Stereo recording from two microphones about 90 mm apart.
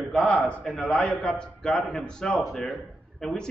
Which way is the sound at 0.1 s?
10° left (ahead or behind).